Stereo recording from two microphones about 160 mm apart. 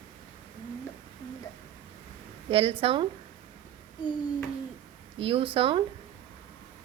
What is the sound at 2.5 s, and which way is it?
Speech, 35° right (ahead or behind).